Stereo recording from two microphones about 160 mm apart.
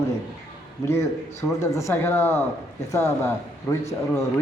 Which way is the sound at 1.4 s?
20° left (ahead or behind).